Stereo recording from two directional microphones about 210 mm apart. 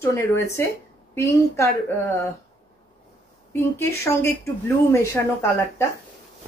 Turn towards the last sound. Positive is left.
turn(degrees=10)  # may be behind; listen again after turning